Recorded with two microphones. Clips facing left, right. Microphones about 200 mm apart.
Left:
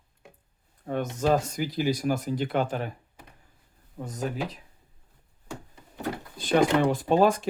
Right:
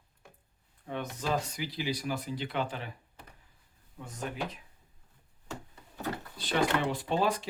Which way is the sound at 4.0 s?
40° left (ahead or behind).